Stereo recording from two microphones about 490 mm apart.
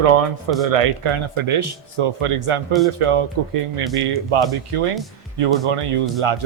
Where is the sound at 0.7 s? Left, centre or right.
Right.